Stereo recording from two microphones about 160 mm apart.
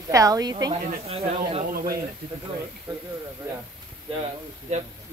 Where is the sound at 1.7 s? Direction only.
65° right (ahead or behind).